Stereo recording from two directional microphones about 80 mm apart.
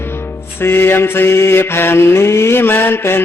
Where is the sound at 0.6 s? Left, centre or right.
Left.